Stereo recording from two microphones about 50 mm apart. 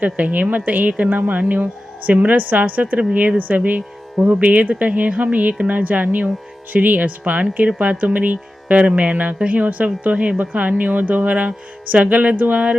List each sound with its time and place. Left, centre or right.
0.0 s speech: right
3.0 s speech: right